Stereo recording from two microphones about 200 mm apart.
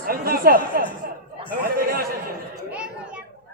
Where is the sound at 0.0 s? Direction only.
50° right (ahead or behind).